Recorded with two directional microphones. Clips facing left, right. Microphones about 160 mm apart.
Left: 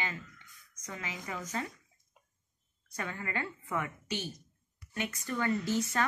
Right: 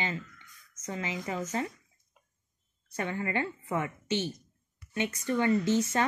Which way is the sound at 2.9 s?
25° right (ahead or behind).